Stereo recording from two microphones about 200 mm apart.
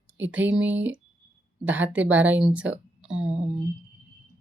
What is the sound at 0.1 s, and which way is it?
A woman's voice, 10° right (ahead or behind).